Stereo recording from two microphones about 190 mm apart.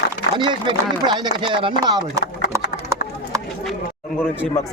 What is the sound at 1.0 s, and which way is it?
Speech, 25° right (ahead or behind).